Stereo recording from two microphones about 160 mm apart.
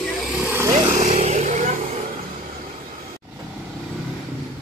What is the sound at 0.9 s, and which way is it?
Vehicle, 45° right (ahead or behind).